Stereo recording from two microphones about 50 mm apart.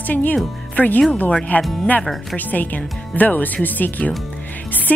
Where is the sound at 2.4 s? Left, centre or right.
Left.